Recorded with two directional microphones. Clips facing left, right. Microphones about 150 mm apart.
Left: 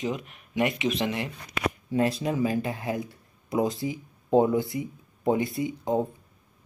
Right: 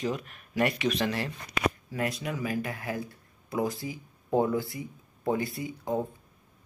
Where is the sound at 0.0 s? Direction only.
20° left (ahead or behind).